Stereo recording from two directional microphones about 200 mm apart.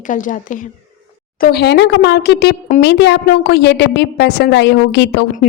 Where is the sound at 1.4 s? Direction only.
50° left (ahead or behind).